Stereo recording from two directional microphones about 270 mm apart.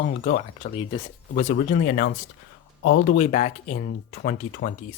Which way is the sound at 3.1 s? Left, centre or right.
Left.